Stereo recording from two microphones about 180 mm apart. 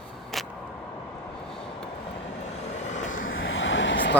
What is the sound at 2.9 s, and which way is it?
Vehicle, 45° left (ahead or behind).